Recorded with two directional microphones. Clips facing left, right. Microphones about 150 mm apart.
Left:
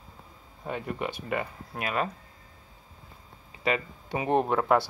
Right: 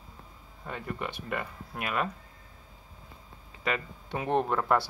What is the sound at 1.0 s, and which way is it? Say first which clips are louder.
Speech: left 4 dB; 5° left (ahead or behind).